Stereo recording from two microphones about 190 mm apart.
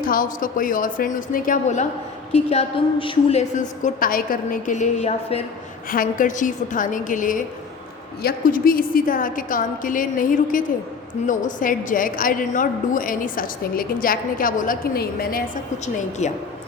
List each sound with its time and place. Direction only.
0.0 s a woman's voice: 50° left (ahead or behind)
5.9 s a woman's voice: 45° left (ahead or behind)
16.2 s a woman's voice: 35° left (ahead or behind)